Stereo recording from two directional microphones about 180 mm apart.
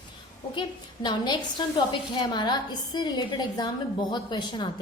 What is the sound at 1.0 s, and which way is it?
A woman's voice, 25° left (ahead or behind).